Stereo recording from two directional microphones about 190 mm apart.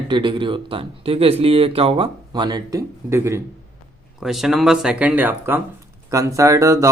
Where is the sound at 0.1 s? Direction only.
25° right (ahead or behind).